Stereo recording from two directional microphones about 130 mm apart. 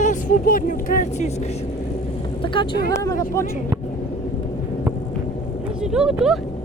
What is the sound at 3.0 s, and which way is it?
Speech, 25° left (ahead or behind).